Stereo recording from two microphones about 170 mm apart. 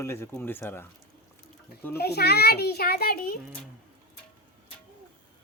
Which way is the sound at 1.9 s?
70° left (ahead or behind).